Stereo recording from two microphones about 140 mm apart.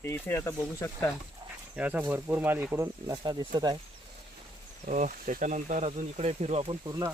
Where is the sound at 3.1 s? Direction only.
30° right (ahead or behind).